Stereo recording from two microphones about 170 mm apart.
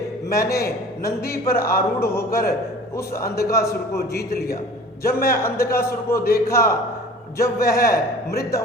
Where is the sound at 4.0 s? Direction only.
65° left (ahead or behind).